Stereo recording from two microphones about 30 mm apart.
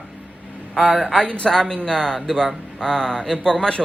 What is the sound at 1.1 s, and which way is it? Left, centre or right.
Speech, left.